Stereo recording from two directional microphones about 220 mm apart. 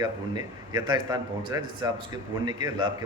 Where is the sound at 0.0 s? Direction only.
15° right (ahead or behind).